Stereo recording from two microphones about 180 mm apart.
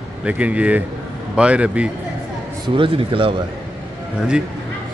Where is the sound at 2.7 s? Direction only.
30° right (ahead or behind).